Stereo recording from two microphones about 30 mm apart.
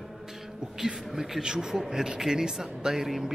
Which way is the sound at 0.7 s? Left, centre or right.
Centre.